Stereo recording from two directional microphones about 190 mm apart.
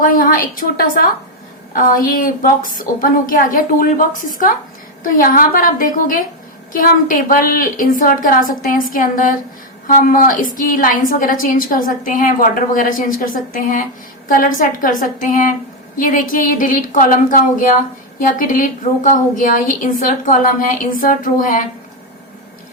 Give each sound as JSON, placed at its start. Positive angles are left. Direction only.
{"t": 0.0, "sound": "a woman's voice", "side_deg": 45}